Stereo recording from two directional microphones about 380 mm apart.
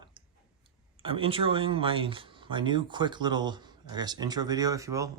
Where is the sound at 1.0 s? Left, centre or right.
Centre.